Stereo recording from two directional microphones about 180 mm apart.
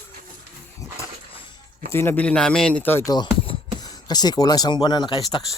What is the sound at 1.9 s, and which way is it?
A man's voice, 10° left (ahead or behind).